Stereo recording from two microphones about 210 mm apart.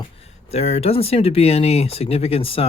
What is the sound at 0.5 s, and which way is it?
Speech, 30° left (ahead or behind).